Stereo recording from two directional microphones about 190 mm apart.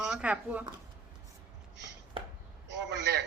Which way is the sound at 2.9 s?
65° right (ahead or behind).